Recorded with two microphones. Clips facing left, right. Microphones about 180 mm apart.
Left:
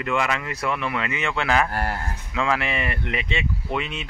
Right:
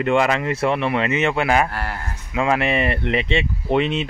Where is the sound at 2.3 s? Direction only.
20° right (ahead or behind).